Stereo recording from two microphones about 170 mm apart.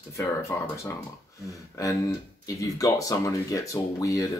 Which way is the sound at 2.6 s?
20° left (ahead or behind).